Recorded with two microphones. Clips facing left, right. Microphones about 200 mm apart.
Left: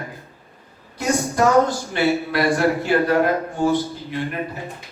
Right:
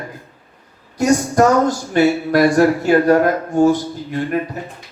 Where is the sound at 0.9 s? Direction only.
45° right (ahead or behind).